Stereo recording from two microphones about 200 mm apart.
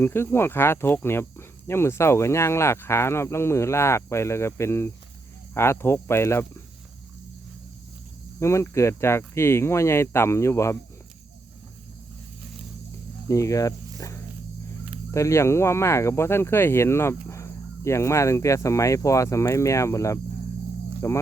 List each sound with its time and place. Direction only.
0.0 s speech: 10° left (ahead or behind)
8.4 s speech: 15° left (ahead or behind)
13.2 s speech: 15° left (ahead or behind)